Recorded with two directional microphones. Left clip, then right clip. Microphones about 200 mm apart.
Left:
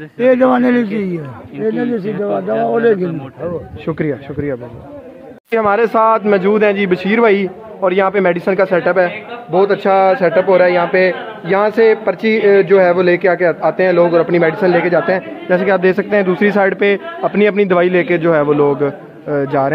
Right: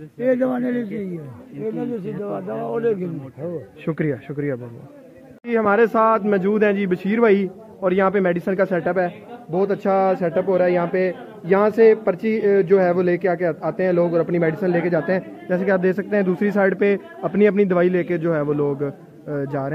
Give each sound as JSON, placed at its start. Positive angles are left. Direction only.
{"t": 0.2, "sound": "a man's voice", "side_deg": 65}
{"t": 2.2, "sound": "a man's voice", "side_deg": 60}
{"t": 3.8, "sound": "a man's voice", "side_deg": 5}